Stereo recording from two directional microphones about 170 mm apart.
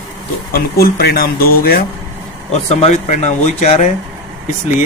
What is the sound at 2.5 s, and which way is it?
Speech, 40° left (ahead or behind).